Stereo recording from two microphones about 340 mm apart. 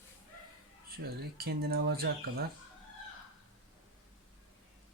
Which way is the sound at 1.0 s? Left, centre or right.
Right.